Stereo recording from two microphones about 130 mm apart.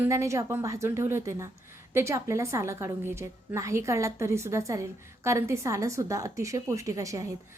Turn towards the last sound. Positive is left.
turn(degrees=-25)  # may be behind; listen again after turning